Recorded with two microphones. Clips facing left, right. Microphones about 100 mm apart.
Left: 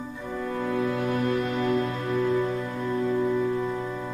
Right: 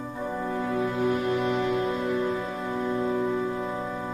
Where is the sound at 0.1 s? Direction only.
35° right (ahead or behind).